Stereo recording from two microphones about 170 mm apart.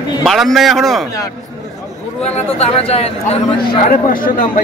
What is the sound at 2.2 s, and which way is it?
Speech, 40° left (ahead or behind).